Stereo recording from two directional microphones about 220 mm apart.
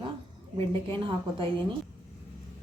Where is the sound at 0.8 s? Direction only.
20° right (ahead or behind).